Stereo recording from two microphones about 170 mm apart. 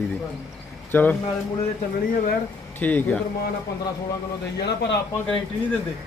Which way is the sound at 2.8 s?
10° left (ahead or behind).